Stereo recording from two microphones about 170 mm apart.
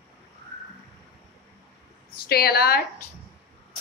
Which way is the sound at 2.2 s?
65° left (ahead or behind).